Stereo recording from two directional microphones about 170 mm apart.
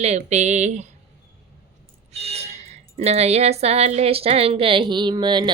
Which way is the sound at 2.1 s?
40° right (ahead or behind).